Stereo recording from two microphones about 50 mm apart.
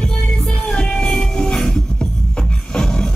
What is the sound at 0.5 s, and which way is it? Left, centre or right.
Music, centre.